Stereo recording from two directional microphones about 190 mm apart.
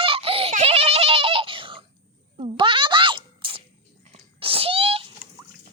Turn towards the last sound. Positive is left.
turn(degrees=-30)  # may be behind; listen again after turning